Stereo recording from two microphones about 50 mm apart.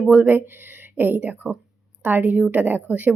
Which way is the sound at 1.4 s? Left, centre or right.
Centre.